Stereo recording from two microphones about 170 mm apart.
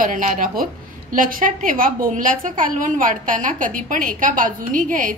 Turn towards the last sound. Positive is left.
turn(degrees=-50)  # may be behind; listen again after turning